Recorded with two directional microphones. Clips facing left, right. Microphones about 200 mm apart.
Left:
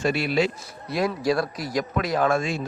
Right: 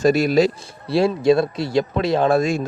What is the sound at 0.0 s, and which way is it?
A man's voice, 40° right (ahead or behind).